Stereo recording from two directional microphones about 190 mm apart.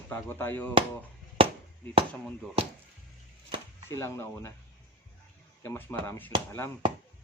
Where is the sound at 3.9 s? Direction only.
15° left (ahead or behind).